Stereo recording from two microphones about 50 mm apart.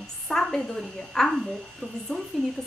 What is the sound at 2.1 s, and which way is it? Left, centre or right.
Speech, left.